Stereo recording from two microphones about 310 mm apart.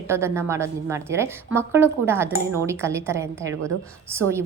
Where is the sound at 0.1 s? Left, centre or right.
Centre.